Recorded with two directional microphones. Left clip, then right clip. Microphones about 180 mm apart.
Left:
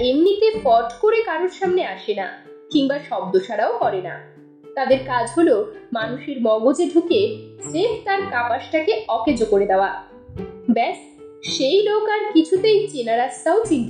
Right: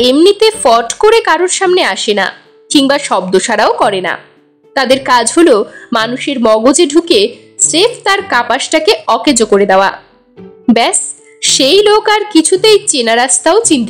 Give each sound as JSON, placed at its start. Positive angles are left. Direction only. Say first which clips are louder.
{"t": 0.0, "sound": "speech", "louder": "right 9 dB", "side_deg": -45}
{"t": 11.4, "sound": "speech", "louder": "right 11 dB", "side_deg": -50}